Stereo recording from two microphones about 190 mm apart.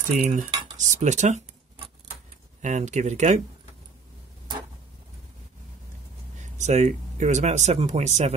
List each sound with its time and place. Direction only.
0.3 s speech: 40° right (ahead or behind)
2.6 s speech: 40° right (ahead or behind)
6.6 s speech: 35° right (ahead or behind)